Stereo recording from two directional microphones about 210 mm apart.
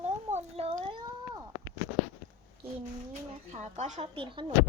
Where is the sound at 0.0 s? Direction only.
30° right (ahead or behind).